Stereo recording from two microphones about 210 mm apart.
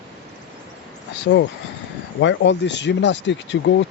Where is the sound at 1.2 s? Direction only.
55° left (ahead or behind).